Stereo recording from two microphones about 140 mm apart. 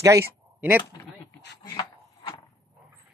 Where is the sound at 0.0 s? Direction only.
20° right (ahead or behind).